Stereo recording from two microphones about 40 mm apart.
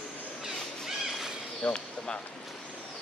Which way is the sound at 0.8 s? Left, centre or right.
Centre.